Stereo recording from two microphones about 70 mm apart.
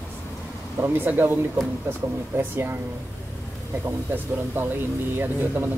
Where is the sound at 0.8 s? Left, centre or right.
Right.